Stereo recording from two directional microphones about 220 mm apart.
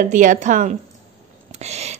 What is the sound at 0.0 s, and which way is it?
A woman's voice, 35° right (ahead or behind).